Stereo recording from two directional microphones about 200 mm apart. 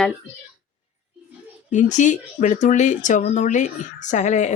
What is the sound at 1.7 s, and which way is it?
Speech, 40° left (ahead or behind).